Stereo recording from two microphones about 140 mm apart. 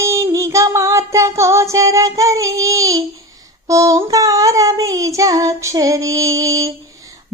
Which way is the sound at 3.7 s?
25° right (ahead or behind).